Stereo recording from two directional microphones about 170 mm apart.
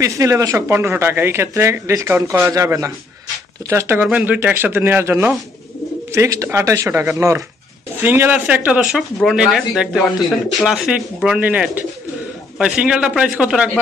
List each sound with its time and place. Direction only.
0.0 s speech: 20° right (ahead or behind)